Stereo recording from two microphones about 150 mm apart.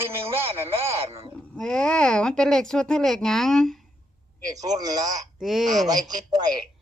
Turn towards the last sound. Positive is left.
turn(degrees=-25)  # may be behind; listen again after turning